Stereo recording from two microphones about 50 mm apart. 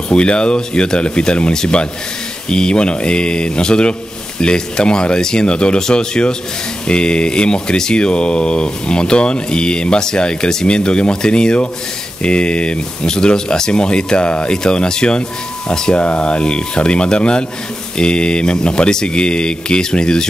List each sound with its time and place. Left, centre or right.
0.1 s speech: centre
16.0 s speech: left